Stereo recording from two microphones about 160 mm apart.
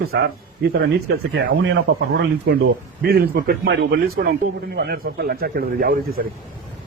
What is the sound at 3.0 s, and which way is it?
Speech, 75° right (ahead or behind).